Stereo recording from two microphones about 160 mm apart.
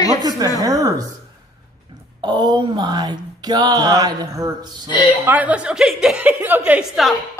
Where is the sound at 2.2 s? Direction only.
25° right (ahead or behind).